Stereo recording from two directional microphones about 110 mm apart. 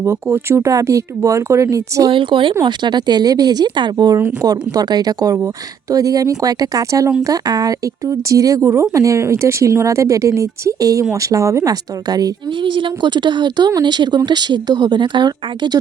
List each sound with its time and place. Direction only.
0.0 s speech: 25° right (ahead or behind)
2.0 s speech: 50° right (ahead or behind)